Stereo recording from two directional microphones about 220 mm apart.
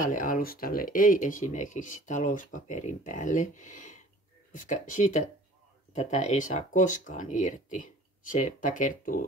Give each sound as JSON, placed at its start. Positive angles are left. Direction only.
{"t": 0.0, "sound": "speech", "side_deg": 40}